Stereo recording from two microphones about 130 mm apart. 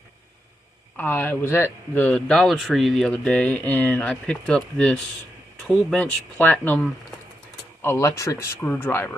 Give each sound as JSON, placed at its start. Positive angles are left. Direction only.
{"t": 0.9, "sound": "speech", "side_deg": 15}